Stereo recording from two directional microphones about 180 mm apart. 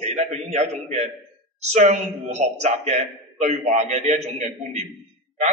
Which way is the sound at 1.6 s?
40° right (ahead or behind).